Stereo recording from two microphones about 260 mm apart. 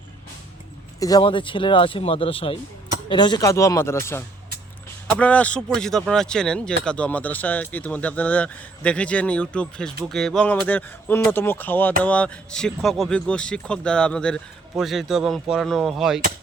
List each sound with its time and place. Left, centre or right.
0.9 s speech: centre